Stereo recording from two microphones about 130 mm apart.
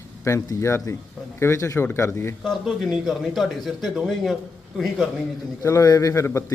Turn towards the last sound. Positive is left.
turn(degrees=20)  # may be behind; listen again after turning